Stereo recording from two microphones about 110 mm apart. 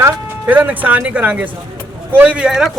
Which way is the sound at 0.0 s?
15° right (ahead or behind).